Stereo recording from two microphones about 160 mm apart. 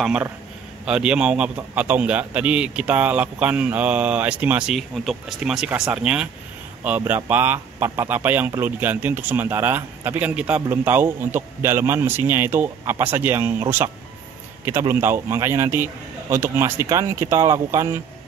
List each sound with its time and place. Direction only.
0.0 s speech: 5° right (ahead or behind)